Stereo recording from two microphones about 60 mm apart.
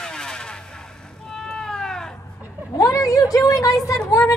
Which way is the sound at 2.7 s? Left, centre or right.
Left.